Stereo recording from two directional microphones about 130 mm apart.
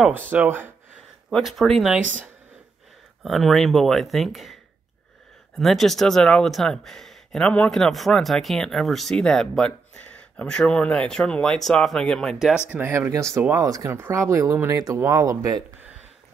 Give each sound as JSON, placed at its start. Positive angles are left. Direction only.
{"t": 0.3, "sound": "speech", "side_deg": -15}
{"t": 1.3, "sound": "speech", "side_deg": 0}
{"t": 2.0, "sound": "speech", "side_deg": -75}
{"t": 3.3, "sound": "speech", "side_deg": 0}
{"t": 5.6, "sound": "speech", "side_deg": 0}
{"t": 12.6, "sound": "speech", "side_deg": -15}